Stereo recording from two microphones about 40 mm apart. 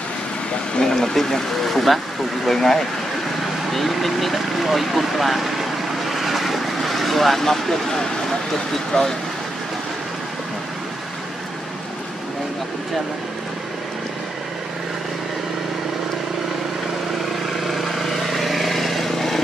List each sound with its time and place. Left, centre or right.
0.7 s speech: centre
3.7 s vehicle: centre
8.9 s speech: left
17.5 s vehicle: centre